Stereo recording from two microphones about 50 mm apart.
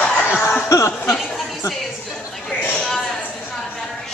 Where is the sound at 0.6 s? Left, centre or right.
Left.